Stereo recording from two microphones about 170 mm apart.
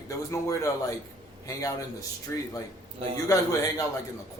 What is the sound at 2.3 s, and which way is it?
A man's voice, 15° left (ahead or behind).